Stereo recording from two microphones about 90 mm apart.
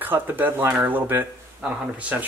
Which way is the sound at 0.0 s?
20° right (ahead or behind).